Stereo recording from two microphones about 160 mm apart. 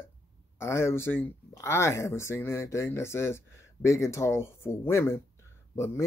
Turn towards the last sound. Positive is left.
turn(degrees=15)  # may be behind; listen again after turning